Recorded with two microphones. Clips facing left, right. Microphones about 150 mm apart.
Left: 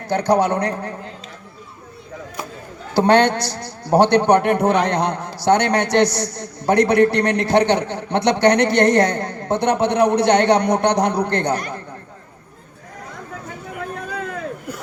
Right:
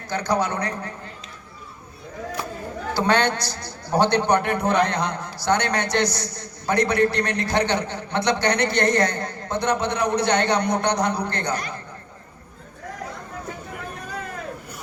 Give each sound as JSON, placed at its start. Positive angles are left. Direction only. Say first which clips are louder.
{"t": 0.1, "sound": "a woman's voice", "louder": "left 6 dB", "side_deg": 70}
{"t": 2.9, "sound": "a woman's voice", "louder": "left 7 dB", "side_deg": 70}